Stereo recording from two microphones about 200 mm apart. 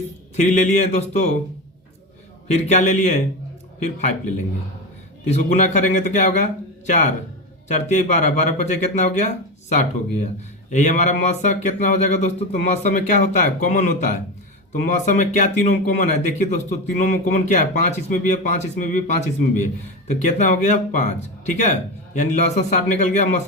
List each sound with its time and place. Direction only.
0.3 s speech: 35° left (ahead or behind)
2.5 s speech: 35° left (ahead or behind)
5.3 s speech: 35° left (ahead or behind)